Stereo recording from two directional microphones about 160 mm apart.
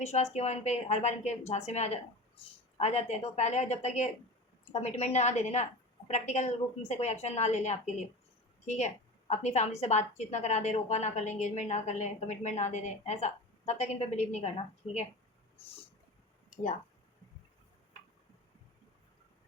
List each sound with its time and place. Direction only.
0.0 s a woman's voice: 45° left (ahead or behind)